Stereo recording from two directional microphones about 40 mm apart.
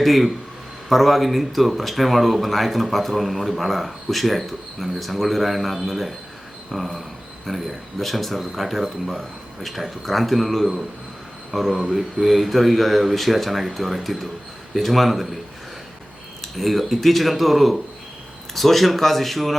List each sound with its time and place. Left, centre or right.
0.0 s a man's voice: centre
16.4 s speech: centre